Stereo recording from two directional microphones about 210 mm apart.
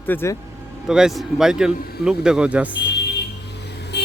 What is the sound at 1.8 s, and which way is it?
Speech, 45° left (ahead or behind).